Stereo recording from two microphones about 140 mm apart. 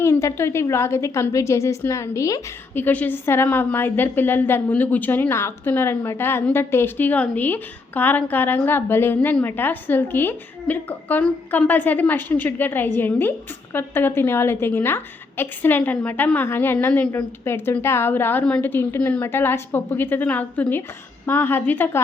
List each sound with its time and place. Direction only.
0.0 s a woman's voice: 20° left (ahead or behind)